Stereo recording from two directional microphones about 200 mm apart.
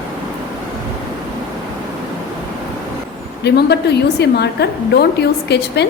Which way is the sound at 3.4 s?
55° left (ahead or behind).